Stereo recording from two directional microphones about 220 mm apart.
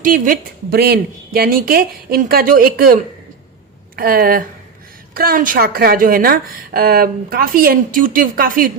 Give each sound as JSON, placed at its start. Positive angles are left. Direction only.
{"t": 0.0, "sound": "a woman's voice", "side_deg": -40}